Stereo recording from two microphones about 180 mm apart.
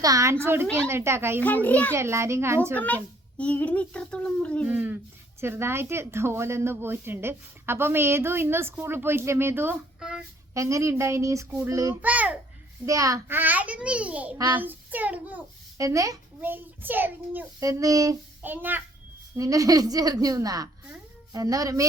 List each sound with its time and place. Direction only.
0.0 s speech: 20° right (ahead or behind)
1.4 s a child's voice: 10° left (ahead or behind)
1.9 s speech: 15° right (ahead or behind)
2.7 s a child's voice: 10° left (ahead or behind)
4.6 s speech: 10° right (ahead or behind)
10.5 s a woman's voice: 15° right (ahead or behind)